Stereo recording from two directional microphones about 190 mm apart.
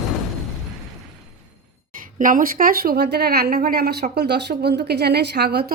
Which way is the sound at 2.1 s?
45° right (ahead or behind).